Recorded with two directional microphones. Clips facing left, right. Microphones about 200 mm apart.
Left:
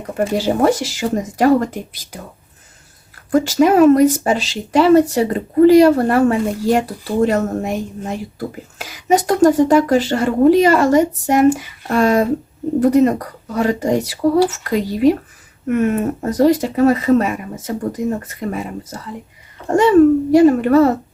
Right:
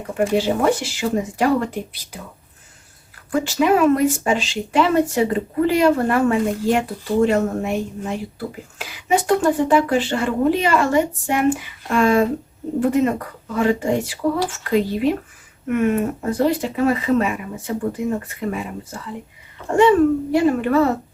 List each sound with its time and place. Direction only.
0.2 s speech: 40° left (ahead or behind)
3.3 s speech: 40° left (ahead or behind)